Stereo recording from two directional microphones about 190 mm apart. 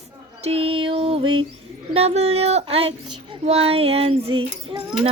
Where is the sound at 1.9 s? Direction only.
35° right (ahead or behind).